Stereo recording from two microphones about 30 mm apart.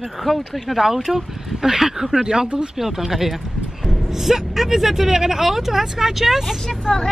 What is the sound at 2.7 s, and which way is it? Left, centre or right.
Speech, centre.